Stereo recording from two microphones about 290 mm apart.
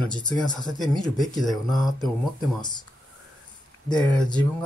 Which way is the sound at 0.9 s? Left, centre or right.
Centre.